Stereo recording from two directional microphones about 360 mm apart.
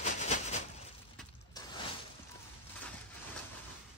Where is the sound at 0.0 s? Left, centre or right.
Centre.